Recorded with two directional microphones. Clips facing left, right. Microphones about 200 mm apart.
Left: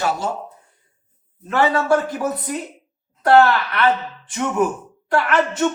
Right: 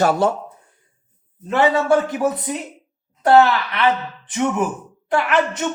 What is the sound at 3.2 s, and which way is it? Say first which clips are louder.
Speech: even; 20° right (ahead or behind).